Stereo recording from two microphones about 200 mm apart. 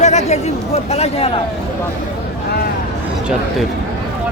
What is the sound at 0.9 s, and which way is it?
Speech, 30° left (ahead or behind).